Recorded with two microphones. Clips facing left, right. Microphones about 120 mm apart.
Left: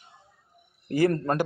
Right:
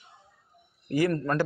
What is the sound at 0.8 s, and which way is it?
Speech, 30° left (ahead or behind).